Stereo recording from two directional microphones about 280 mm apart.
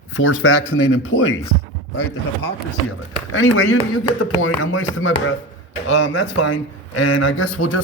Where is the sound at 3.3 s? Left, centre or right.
Left.